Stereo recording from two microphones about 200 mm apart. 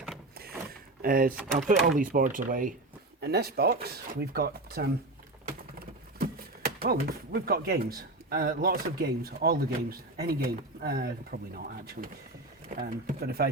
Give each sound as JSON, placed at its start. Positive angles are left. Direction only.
{"t": 0.7, "sound": "a sound", "side_deg": -45}
{"t": 1.5, "sound": "speech", "side_deg": -40}
{"t": 3.2, "sound": "speech", "side_deg": -55}
{"t": 6.7, "sound": "speech", "side_deg": -50}